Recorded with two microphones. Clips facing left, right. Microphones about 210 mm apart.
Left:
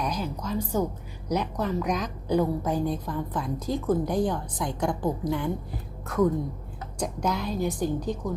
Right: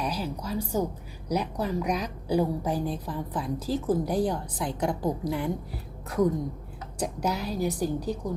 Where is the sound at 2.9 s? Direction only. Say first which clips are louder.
Left 2 dB; 30° right (ahead or behind).